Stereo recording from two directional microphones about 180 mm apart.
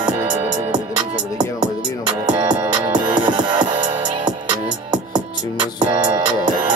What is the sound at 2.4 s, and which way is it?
Music, 25° right (ahead or behind).